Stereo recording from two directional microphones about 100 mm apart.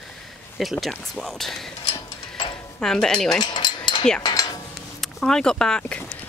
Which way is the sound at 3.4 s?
50° left (ahead or behind).